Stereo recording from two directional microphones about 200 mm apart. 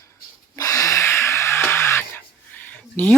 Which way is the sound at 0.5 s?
15° left (ahead or behind).